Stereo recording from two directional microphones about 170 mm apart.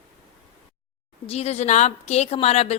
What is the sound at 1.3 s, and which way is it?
A woman's voice, 40° left (ahead or behind).